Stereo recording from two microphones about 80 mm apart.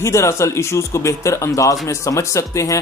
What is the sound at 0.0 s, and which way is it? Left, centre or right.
Speech, left.